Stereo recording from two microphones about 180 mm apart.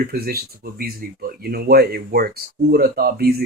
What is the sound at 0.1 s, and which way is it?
Speech, 55° right (ahead or behind).